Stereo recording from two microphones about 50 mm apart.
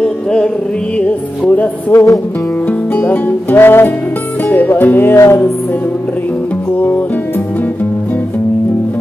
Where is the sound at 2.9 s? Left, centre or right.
Left.